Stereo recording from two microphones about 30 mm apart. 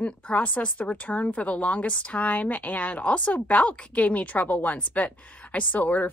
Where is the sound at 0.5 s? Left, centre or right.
Left.